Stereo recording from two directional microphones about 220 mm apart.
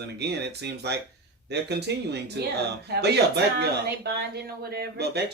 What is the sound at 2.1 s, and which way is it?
Speech, 50° right (ahead or behind).